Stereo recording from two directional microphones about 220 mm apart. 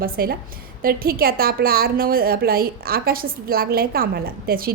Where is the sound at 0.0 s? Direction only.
40° right (ahead or behind).